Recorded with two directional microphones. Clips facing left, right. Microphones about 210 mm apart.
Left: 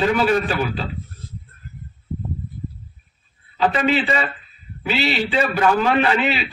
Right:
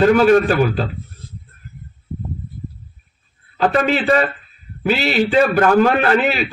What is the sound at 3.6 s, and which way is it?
A man's voice, 45° right (ahead or behind).